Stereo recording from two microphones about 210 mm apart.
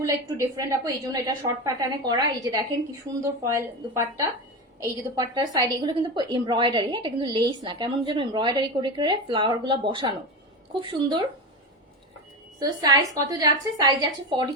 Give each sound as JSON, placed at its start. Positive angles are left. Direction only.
{"t": 0.0, "sound": "a woman's voice", "side_deg": -15}
{"t": 12.5, "sound": "a woman's voice", "side_deg": -20}